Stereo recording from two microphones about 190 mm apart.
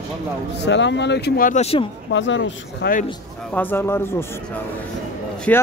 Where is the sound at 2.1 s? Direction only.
75° left (ahead or behind).